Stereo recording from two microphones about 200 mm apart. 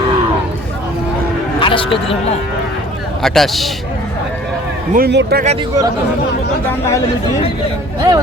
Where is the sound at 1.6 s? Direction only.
25° left (ahead or behind).